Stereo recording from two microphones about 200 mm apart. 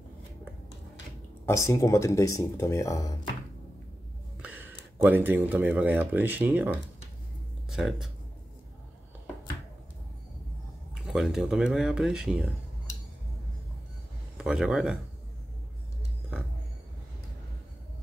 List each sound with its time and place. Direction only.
1.4 s speech: 15° left (ahead or behind)
4.4 s a sound: 10° right (ahead or behind)
5.0 s speech: 10° right (ahead or behind)
11.0 s speech: 5° right (ahead or behind)
14.3 s speech: 5° right (ahead or behind)